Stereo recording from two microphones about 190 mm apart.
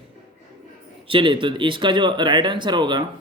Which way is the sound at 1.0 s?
25° right (ahead or behind).